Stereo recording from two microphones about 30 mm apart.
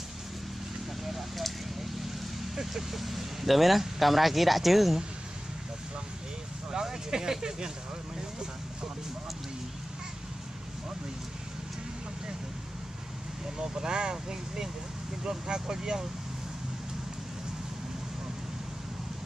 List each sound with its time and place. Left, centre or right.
2.5 s speech: centre
6.7 s speech: centre
8.2 s vehicle: right
13.6 s speech: right